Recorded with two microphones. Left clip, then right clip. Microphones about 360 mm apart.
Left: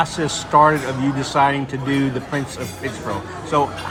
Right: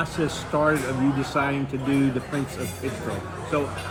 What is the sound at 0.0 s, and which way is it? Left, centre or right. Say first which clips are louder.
Speech: left 6 dB; left.